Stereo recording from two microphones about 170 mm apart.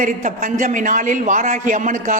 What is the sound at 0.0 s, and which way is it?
A man's voice, 50° right (ahead or behind).